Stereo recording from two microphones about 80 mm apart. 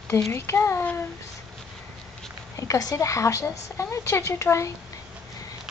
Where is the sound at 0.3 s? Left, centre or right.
Left.